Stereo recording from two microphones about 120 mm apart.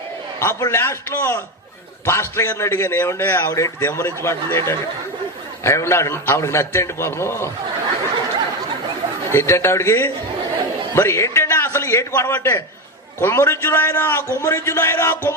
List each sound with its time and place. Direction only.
0.3 s a man's voice: 20° left (ahead or behind)
9.3 s a man's voice: 20° left (ahead or behind)